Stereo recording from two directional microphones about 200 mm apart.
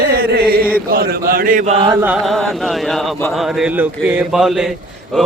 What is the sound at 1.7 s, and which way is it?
Chant, 25° right (ahead or behind).